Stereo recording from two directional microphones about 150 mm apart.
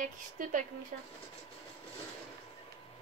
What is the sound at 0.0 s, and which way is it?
Speech, 60° right (ahead or behind).